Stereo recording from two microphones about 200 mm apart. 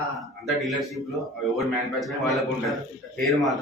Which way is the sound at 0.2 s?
Centre (ahead or behind).